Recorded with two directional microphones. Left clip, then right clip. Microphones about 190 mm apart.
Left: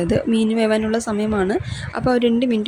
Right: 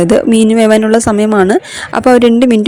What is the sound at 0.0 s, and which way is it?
A woman's voice, 50° right (ahead or behind).